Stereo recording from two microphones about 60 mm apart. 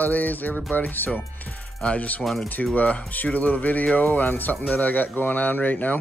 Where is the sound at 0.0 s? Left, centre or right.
Left.